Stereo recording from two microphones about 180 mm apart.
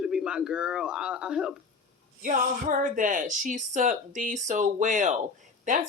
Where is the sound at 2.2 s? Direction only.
50° right (ahead or behind).